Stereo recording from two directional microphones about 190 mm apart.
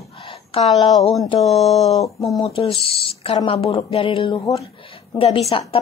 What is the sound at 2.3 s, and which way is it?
Speech, 30° left (ahead or behind).